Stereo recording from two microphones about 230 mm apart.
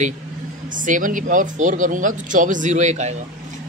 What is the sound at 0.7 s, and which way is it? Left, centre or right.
Speech, right.